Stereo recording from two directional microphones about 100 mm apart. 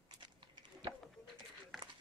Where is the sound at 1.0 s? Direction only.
Centre (ahead or behind).